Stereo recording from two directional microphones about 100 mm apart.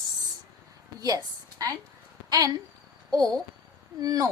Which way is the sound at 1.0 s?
35° right (ahead or behind).